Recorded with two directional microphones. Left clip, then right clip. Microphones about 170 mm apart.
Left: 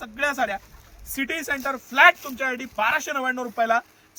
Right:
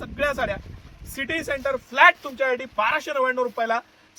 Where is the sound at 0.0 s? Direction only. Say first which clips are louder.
Even; 50° right (ahead or behind).